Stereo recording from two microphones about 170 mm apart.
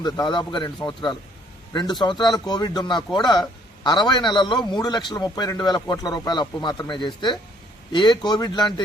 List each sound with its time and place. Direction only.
0.0 s a man's voice: 25° left (ahead or behind)